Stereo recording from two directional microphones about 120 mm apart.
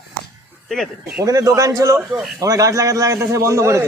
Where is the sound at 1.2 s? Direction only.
30° right (ahead or behind).